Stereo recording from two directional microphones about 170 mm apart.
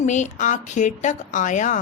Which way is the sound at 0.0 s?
45° left (ahead or behind).